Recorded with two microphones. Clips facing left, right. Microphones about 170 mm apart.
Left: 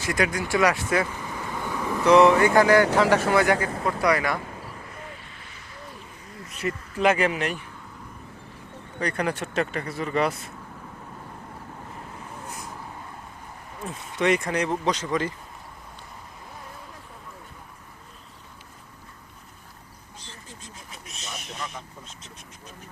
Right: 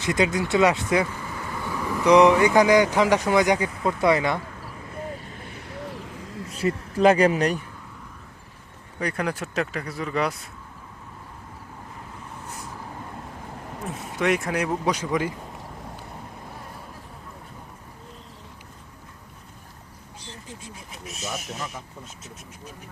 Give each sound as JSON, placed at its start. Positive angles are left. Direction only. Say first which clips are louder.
{"t": 0.0, "sound": "speech", "louder": "right 3 dB", "side_deg": -20}
{"t": 1.3, "sound": "vehicle", "louder": "even", "side_deg": 20}
{"t": 2.0, "sound": "a sound", "louder": "right 1 dB", "side_deg": -15}
{"t": 4.0, "sound": "speech", "louder": "right 3 dB", "side_deg": -25}
{"t": 4.9, "sound": "vehicle", "louder": "right 7 dB", "side_deg": -40}
{"t": 6.5, "sound": "speech", "louder": "right 4 dB", "side_deg": -30}
{"t": 9.0, "sound": "speech", "louder": "even", "side_deg": -5}
{"t": 14.2, "sound": "speech", "louder": "left 1 dB", "side_deg": 0}
{"t": 20.2, "sound": "a sound", "louder": "right 5 dB", "side_deg": -15}
{"t": 21.3, "sound": "vehicle", "louder": "right 3 dB", "side_deg": -5}